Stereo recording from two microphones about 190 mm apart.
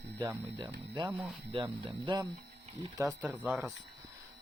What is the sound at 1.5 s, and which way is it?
Speech, 25° right (ahead or behind).